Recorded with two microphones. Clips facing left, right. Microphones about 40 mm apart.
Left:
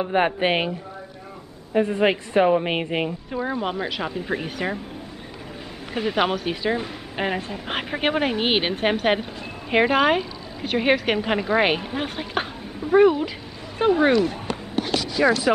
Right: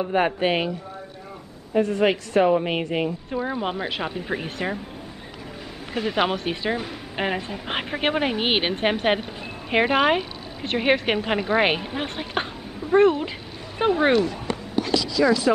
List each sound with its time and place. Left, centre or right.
0.0 s a woman's voice: centre
3.3 s speech: centre
4.3 s speech: centre
5.9 s speech: centre
6.3 s a woman's voice: centre
13.7 s speech: centre
15.1 s speech: left